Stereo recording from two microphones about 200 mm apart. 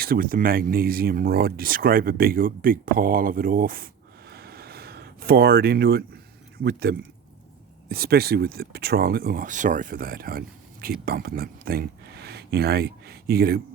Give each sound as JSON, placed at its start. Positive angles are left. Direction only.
{"t": 0.0, "sound": "speech", "side_deg": -45}
{"t": 4.3, "sound": "a sound", "side_deg": -50}
{"t": 6.6, "sound": "speech", "side_deg": -55}